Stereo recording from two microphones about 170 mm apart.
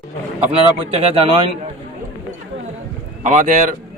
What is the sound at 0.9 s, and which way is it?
Speech, 35° right (ahead or behind).